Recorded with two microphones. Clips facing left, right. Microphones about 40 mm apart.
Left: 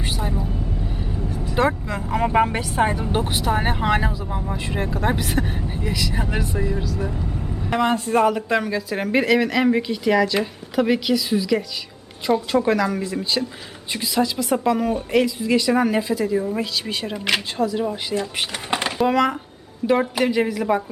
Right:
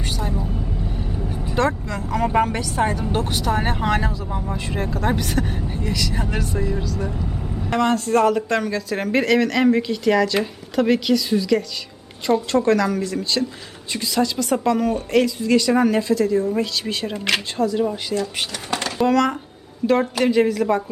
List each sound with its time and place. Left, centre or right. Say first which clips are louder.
0.0 s vehicle: even; centre
0.3 s vehicle: even; centre
1.5 s speech: left 1 dB; centre
2.6 s speech: left 1 dB; left; by 18.2 s centre
18.5 s a sound: left 2 dB; left
18.9 s speech: right 2 dB; centre